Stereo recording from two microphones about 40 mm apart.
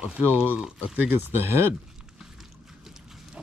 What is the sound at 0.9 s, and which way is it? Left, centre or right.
Speech, right.